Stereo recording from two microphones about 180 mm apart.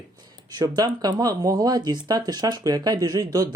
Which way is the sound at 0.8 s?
20° right (ahead or behind).